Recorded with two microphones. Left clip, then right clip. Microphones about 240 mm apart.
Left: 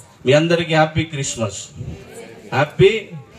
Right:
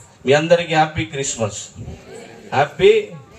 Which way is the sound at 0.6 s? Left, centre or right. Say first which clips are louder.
Even; left.